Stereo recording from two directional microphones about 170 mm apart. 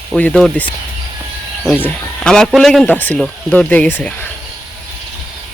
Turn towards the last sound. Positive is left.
turn(degrees=10)  # may be behind; listen again after turning